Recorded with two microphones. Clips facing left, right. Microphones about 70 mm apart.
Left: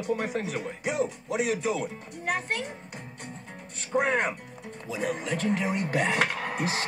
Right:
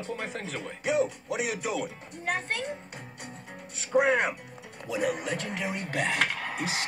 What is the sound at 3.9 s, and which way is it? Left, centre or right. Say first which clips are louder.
A man's voice: right 2 dB; centre.